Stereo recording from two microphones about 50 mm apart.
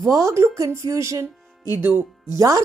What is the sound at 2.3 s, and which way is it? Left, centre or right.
Speech, right.